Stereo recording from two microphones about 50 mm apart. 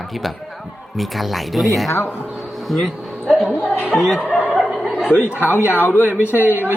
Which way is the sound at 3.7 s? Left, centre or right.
Left.